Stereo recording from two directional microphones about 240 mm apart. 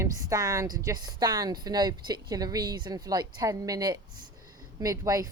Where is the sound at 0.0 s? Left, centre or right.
Centre.